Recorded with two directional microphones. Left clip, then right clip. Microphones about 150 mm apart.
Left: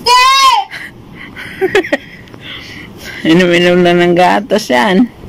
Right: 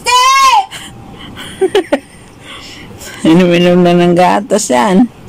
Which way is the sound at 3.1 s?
10° right (ahead or behind).